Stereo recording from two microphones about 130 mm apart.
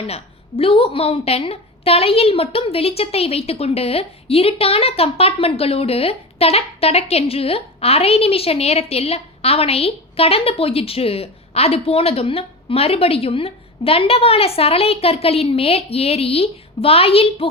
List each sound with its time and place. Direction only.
0.1 s a woman's voice: 45° left (ahead or behind)